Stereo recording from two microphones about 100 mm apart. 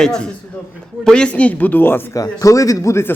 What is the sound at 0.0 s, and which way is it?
A man's voice, 5° left (ahead or behind).